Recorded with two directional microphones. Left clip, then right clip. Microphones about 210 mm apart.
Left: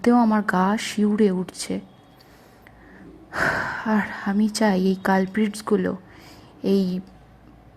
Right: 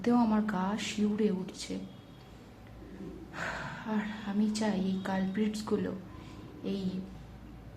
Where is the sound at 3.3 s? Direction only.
45° left (ahead or behind).